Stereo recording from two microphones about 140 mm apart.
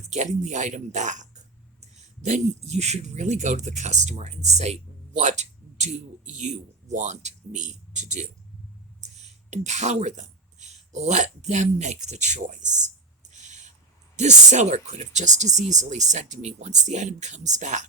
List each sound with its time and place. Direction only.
0.1 s speech: 55° right (ahead or behind)
9.0 s a sound: 55° right (ahead or behind)
14.2 s speech: 55° right (ahead or behind)